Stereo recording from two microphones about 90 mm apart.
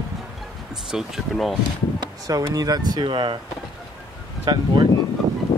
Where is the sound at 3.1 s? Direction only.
65° right (ahead or behind).